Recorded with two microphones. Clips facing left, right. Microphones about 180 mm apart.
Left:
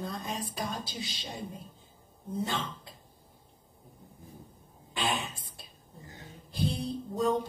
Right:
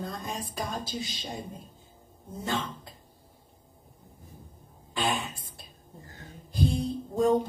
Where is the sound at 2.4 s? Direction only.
45° right (ahead or behind).